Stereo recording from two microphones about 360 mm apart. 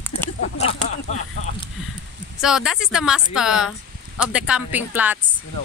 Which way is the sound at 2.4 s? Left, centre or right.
Centre.